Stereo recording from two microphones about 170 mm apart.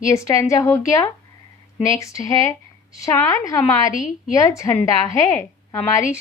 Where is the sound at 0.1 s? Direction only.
15° left (ahead or behind).